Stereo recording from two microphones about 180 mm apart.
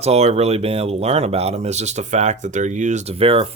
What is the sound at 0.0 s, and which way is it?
Speech, 35° right (ahead or behind).